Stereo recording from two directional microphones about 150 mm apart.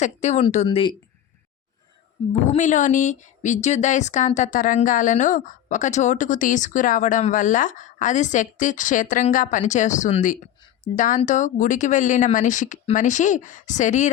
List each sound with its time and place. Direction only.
0.0 s speech: 50° left (ahead or behind)
2.5 s speech: 55° left (ahead or behind)